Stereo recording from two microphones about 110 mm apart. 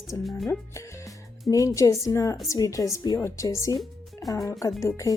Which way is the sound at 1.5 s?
30° left (ahead or behind).